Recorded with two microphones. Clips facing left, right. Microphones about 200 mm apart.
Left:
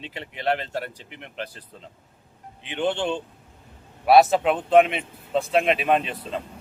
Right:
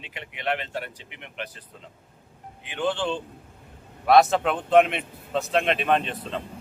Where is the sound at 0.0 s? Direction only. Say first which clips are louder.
Left 4 dB; 35° left (ahead or behind).